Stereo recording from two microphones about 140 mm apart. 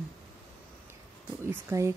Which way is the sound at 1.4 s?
15° right (ahead or behind).